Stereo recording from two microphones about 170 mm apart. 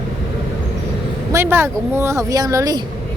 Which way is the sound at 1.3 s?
15° right (ahead or behind).